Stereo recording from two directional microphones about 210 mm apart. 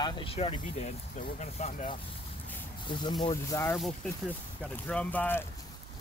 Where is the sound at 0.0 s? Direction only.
25° left (ahead or behind).